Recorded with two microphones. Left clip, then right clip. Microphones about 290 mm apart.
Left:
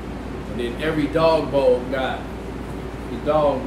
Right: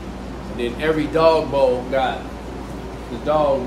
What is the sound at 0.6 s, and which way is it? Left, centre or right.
Speech, centre.